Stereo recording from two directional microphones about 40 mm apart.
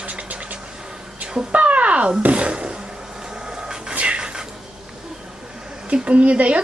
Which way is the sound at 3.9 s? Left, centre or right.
Right.